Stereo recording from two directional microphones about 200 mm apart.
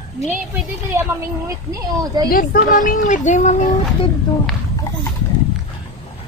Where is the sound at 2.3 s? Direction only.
45° left (ahead or behind).